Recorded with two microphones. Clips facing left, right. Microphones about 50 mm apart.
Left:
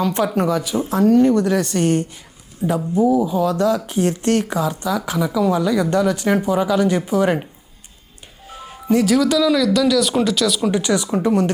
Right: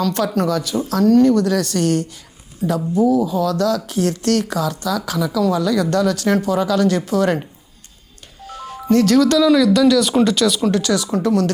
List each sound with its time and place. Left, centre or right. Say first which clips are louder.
0.0 s speech: even; centre
8.4 s speech: right 2 dB; centre
10.7 s speech: right 1 dB; centre